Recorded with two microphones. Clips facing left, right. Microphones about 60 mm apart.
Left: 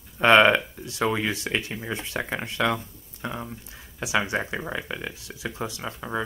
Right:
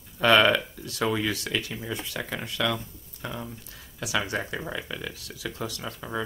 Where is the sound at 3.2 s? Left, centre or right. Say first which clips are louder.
Left 3 dB; centre.